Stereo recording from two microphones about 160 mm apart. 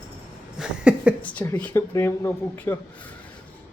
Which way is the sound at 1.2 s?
10° left (ahead or behind).